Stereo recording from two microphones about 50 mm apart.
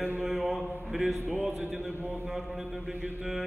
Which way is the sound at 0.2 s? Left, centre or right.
Centre.